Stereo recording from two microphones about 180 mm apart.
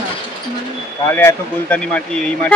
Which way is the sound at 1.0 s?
15° left (ahead or behind).